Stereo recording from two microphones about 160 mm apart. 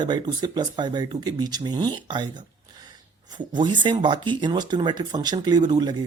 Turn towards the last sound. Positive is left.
turn(degrees=-25)  # may be behind; listen again after turning